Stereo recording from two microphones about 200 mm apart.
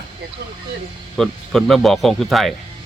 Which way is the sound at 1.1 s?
Centre (ahead or behind).